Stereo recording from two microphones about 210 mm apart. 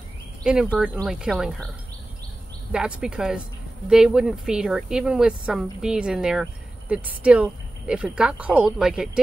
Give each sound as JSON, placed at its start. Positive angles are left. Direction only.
{"t": 0.4, "sound": "speech", "side_deg": -5}
{"t": 2.7, "sound": "speech", "side_deg": -5}